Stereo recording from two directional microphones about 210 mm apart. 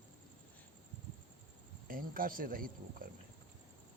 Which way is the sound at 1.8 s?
40° right (ahead or behind).